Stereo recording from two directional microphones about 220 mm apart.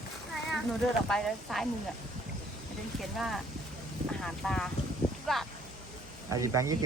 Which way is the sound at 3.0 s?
Centre (ahead or behind).